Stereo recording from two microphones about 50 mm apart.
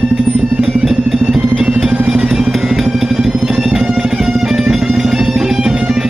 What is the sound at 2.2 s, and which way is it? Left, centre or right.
Vehicle, centre.